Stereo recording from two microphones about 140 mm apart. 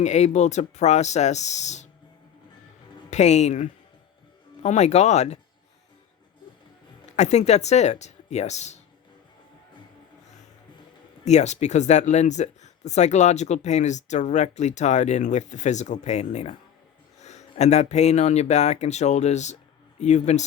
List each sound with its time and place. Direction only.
0.0 s speech: 55° left (ahead or behind)
3.1 s speech: 55° left (ahead or behind)
7.2 s speech: 55° left (ahead or behind)
11.3 s speech: 55° left (ahead or behind)